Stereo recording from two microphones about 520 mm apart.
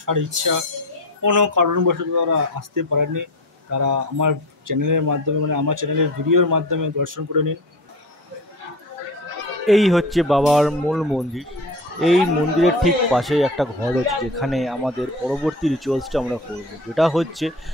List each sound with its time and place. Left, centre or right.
0.0 s speech: right
9.7 s speech: centre